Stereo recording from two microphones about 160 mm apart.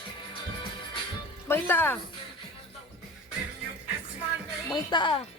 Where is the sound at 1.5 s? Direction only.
10° left (ahead or behind).